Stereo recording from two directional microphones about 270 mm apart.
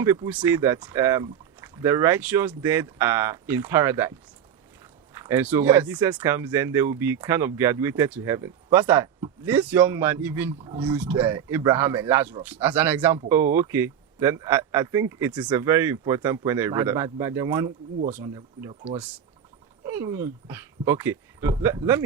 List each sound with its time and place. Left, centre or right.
0.0 s speech: centre
5.1 s speech: centre
10.6 s speech: centre
10.9 s speech: centre; by 19.0 s right
19.8 s speech: centre